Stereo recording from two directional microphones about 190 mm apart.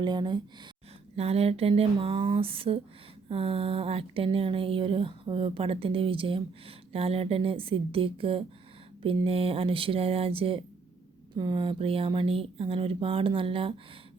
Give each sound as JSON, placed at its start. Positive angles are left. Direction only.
{"t": 0.0, "sound": "speech", "side_deg": -25}